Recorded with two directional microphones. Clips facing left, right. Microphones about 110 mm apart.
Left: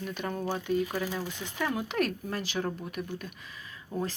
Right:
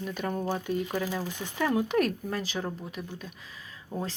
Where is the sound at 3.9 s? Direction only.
20° right (ahead or behind).